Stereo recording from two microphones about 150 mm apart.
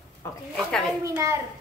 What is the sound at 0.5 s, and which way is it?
Speech, centre (ahead or behind).